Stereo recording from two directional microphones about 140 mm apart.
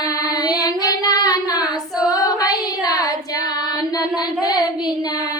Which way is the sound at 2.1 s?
25° left (ahead or behind).